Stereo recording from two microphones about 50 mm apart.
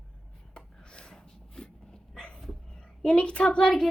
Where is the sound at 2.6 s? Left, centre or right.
Centre.